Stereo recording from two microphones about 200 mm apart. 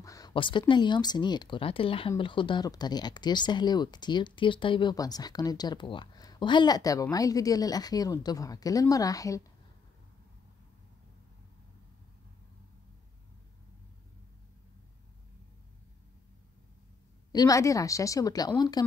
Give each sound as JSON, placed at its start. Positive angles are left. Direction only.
{"t": 0.0, "sound": "speech", "side_deg": 15}
{"t": 17.3, "sound": "a woman's voice", "side_deg": 20}